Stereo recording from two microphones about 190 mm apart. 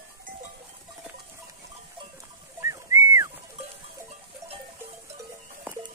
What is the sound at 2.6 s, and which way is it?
Whistling, 15° right (ahead or behind).